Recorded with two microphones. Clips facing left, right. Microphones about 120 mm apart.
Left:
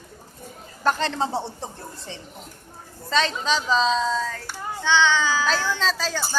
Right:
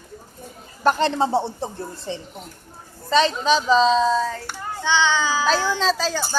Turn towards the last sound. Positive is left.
turn(degrees=-20)  # may be behind; listen again after turning